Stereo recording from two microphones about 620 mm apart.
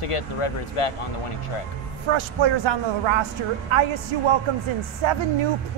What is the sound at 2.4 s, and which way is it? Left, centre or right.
Speech, right.